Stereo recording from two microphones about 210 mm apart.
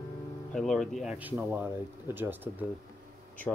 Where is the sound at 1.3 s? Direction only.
10° right (ahead or behind).